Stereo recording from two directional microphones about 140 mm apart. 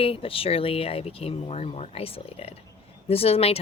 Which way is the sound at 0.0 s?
40° left (ahead or behind).